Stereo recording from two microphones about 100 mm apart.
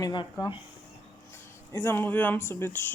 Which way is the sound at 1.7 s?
25° left (ahead or behind).